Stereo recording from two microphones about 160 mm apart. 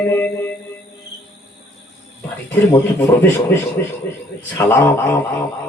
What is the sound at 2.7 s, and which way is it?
A man's voice, 15° left (ahead or behind).